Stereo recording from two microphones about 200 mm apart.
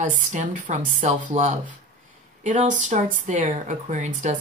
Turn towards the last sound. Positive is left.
turn(degrees=-35)  # may be behind; listen again after turning